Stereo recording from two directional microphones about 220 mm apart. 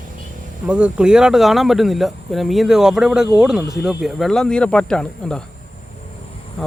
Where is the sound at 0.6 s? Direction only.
5° right (ahead or behind).